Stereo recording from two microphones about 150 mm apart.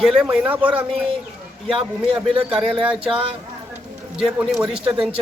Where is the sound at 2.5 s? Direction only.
5° right (ahead or behind).